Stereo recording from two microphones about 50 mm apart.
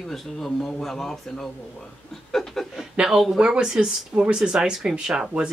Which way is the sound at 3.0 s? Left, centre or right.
Centre.